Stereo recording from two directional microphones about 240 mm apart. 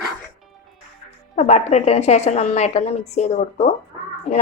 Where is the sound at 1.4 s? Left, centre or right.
Left.